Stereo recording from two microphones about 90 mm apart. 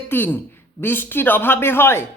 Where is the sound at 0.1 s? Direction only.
25° left (ahead or behind).